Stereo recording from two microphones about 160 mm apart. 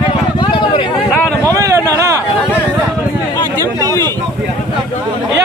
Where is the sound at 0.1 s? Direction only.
30° left (ahead or behind).